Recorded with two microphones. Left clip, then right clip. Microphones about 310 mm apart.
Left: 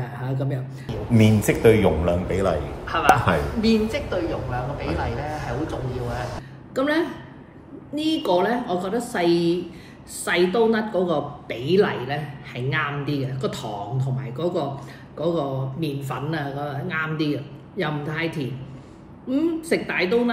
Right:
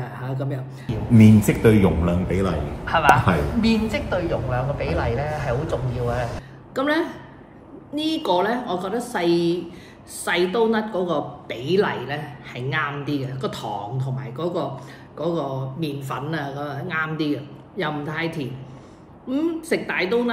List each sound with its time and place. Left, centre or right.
0.0 s music: centre
0.8 s a sound: left
1.4 s a man's voice: centre
6.7 s a woman's voice: centre